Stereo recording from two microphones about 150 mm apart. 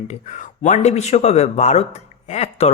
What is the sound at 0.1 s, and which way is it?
Speech, 55° left (ahead or behind).